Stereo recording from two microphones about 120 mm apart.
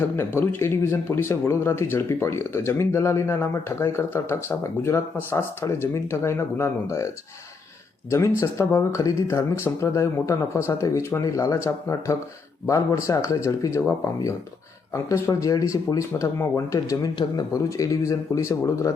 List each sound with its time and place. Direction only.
0.2 s speech: 20° left (ahead or behind)
8.4 s speech: 25° left (ahead or behind)